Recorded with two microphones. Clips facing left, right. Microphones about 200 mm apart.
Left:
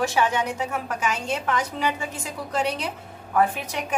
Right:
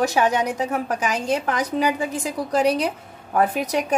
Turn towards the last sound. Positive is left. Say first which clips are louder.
# right 7 dB
turn(degrees=-40)  # may be behind; listen again after turning